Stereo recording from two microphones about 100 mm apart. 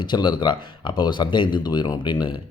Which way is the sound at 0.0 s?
50° left (ahead or behind).